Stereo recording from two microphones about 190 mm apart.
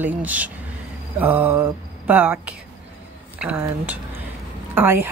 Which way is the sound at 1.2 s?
10° right (ahead or behind).